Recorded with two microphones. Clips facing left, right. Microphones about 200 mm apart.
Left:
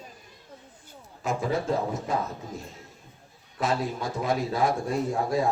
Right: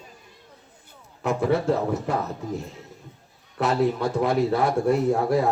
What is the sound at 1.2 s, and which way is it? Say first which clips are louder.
Speech: right 5 dB; 65° right (ahead or behind).